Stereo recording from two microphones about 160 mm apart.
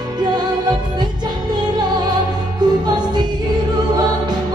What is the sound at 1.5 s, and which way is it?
Music, 25° right (ahead or behind).